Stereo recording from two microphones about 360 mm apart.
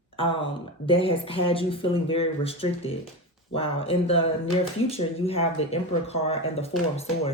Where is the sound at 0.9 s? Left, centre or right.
Centre.